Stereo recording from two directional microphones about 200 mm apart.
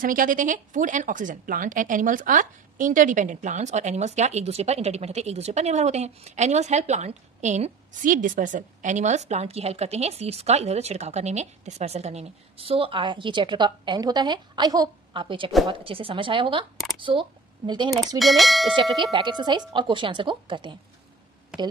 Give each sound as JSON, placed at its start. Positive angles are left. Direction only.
{"t": 0.0, "sound": "speech", "side_deg": -45}
{"t": 18.2, "sound": "speech", "side_deg": 0}
{"t": 18.8, "sound": "speech", "side_deg": -25}